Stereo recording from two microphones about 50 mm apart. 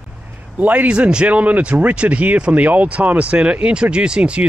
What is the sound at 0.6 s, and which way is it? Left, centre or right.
Speech, right.